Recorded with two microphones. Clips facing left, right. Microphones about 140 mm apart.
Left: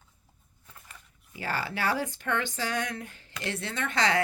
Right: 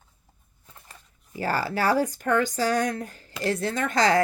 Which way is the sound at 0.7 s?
30° right (ahead or behind).